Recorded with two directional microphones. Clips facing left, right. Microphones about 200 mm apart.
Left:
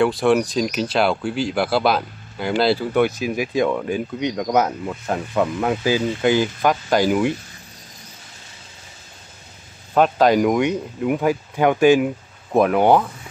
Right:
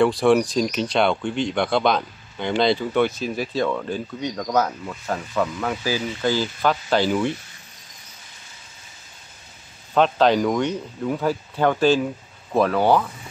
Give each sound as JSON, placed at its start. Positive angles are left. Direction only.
{"t": 0.0, "sound": "speech", "side_deg": 0}
{"t": 9.9, "sound": "speech", "side_deg": 10}